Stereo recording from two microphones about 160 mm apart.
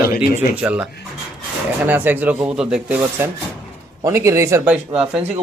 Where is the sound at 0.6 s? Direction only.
5° right (ahead or behind).